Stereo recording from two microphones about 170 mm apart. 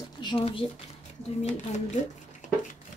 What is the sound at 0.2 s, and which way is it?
Speech, 30° left (ahead or behind).